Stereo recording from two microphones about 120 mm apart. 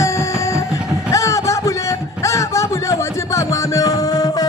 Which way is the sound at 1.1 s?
25° left (ahead or behind).